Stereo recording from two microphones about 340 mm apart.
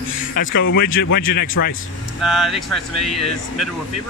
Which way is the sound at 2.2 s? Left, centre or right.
Centre.